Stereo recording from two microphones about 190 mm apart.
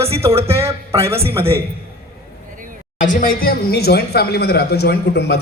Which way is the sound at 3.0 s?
45° left (ahead or behind).